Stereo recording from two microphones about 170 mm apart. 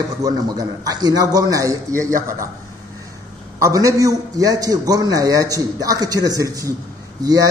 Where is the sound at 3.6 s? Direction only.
20° right (ahead or behind).